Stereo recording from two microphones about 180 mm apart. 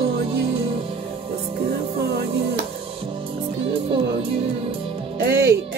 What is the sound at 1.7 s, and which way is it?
Speech, 60° right (ahead or behind).